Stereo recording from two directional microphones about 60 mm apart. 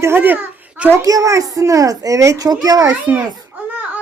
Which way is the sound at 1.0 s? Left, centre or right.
Right.